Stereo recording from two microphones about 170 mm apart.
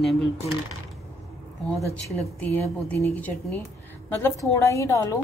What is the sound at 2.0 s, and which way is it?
A woman's voice, 10° left (ahead or behind).